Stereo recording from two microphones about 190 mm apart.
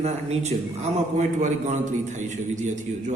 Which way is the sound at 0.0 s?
35° right (ahead or behind).